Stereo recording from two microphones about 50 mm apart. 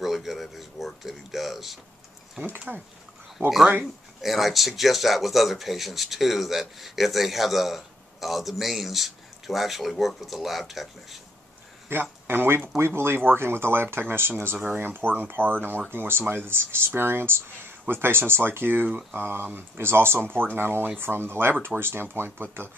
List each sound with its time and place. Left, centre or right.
0.0 s a sound: centre
1.0 s mechanisms: centre
2.7 s speech: right
3.3 s speech: centre
11.9 s speech: right